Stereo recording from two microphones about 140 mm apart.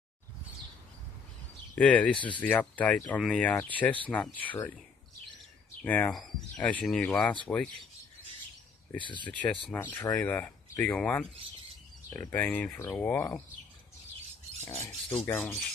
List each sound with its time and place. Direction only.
1.8 s speech: 10° left (ahead or behind)
2.1 s speech: 35° left (ahead or behind)
2.4 s speech: 10° left (ahead or behind)
5.9 s speech: 10° left (ahead or behind)
9.2 s speech: 10° left (ahead or behind)
12.3 s speech: 10° left (ahead or behind)
14.8 s speech: 5° left (ahead or behind)